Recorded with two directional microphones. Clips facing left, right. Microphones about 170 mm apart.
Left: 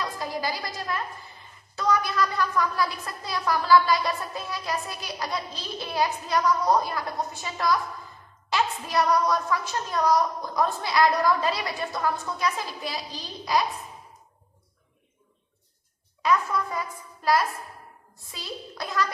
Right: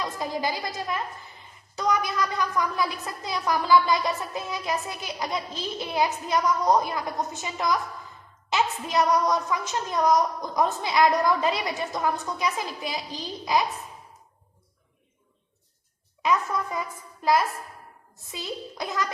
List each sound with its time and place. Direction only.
0.0 s a woman's voice: 20° right (ahead or behind)
16.2 s a woman's voice: 20° right (ahead or behind)
18.3 s a woman's voice: 20° right (ahead or behind)